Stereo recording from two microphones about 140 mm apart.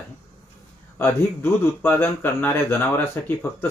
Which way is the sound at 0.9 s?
15° left (ahead or behind).